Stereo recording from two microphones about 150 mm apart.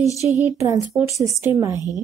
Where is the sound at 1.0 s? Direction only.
20° right (ahead or behind).